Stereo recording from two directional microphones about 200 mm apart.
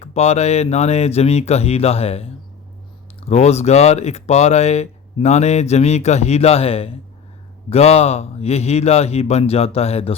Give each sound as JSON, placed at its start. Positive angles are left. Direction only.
{"t": 0.0, "sound": "speech", "side_deg": 35}